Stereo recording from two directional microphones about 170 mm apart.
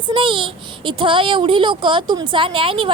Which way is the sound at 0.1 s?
30° right (ahead or behind).